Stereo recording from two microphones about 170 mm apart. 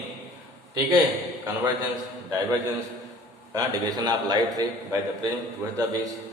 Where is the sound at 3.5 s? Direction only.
20° right (ahead or behind).